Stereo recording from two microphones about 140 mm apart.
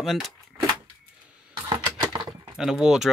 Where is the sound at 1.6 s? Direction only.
35° right (ahead or behind).